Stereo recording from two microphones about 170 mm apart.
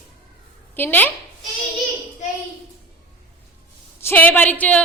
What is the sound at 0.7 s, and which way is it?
Speech, 10° left (ahead or behind).